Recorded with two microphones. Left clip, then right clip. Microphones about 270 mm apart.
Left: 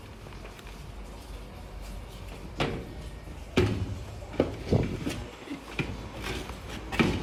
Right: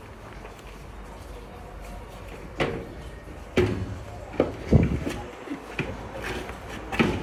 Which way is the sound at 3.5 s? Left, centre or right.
Centre.